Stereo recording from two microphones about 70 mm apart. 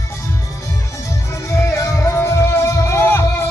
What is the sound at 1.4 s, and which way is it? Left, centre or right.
Music, left.